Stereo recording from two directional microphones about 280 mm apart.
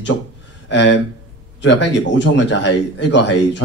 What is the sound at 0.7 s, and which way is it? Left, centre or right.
A man's voice, left.